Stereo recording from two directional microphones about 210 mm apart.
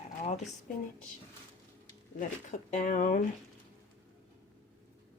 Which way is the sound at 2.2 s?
35° left (ahead or behind).